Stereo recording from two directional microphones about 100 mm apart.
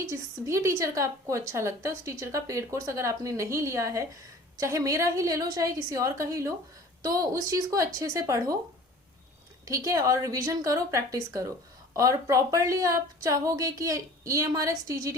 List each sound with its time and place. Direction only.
0.1 s a woman's voice: 30° right (ahead or behind)
9.6 s a woman's voice: 35° right (ahead or behind)